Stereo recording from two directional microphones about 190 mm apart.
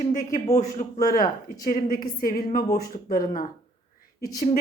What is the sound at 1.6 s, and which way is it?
A woman's voice, 50° left (ahead or behind).